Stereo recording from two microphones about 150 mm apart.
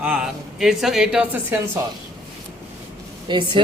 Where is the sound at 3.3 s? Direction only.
35° right (ahead or behind).